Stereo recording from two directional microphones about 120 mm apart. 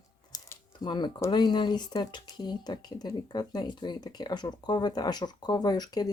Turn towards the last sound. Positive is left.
turn(degrees=35)  # may be behind; listen again after turning